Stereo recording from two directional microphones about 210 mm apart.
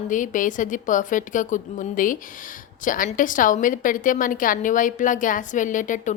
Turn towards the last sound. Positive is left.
turn(degrees=35)  # may be behind; listen again after turning